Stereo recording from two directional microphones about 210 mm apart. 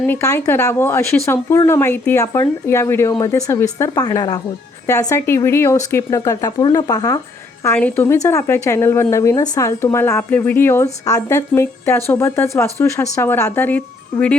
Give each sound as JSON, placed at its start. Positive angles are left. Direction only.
{"t": 0.0, "sound": "speech", "side_deg": 10}